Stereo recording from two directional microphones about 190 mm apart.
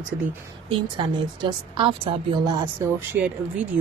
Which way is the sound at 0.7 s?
25° right (ahead or behind).